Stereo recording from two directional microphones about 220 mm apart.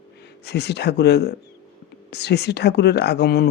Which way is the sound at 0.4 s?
50° left (ahead or behind).